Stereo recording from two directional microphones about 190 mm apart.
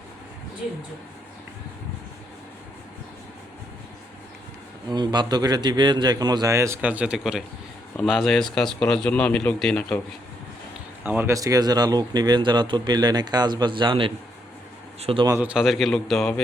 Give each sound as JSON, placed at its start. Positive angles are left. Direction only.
{"t": 4.9, "sound": "speech", "side_deg": -20}
{"t": 11.0, "sound": "speech", "side_deg": -10}
{"t": 15.3, "sound": "speech", "side_deg": -5}